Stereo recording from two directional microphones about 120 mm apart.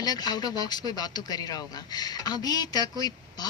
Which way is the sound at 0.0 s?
35° left (ahead or behind).